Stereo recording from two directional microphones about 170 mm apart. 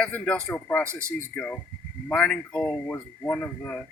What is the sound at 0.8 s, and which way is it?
Speech, 15° right (ahead or behind).